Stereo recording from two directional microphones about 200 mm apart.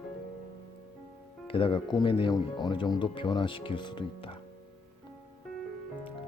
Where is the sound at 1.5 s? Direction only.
25° left (ahead or behind).